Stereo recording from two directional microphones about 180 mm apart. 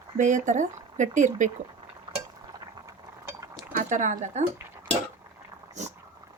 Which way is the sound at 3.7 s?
45° right (ahead or behind).